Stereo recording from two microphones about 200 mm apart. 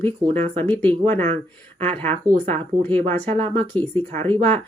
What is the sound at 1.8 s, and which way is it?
Speech, 30° right (ahead or behind).